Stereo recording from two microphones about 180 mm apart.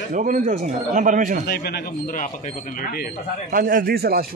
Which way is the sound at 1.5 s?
60° left (ahead or behind).